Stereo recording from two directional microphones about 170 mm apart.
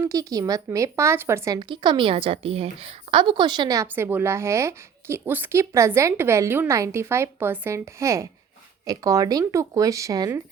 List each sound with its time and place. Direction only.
0.0 s a woman's voice: 20° right (ahead or behind)
1.5 s a woman's voice: 30° right (ahead or behind)